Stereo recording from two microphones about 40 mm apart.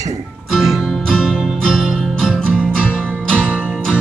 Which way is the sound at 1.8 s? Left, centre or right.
Right.